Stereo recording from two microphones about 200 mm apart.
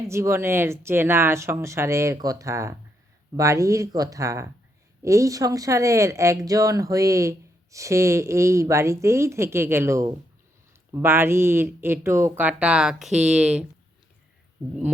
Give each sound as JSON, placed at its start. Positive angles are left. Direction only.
{"t": 0.1, "sound": "speech", "side_deg": -15}